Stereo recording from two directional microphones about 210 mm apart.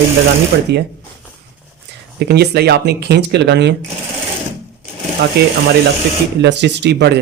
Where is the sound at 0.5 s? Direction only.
50° right (ahead or behind).